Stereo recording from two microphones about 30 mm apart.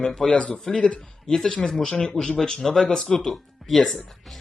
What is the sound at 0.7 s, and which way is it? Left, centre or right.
Speech, centre.